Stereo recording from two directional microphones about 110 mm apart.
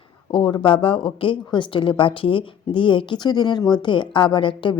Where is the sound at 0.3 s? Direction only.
50° left (ahead or behind).